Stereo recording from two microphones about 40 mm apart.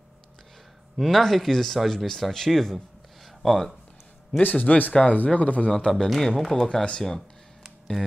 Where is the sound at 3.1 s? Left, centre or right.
Centre.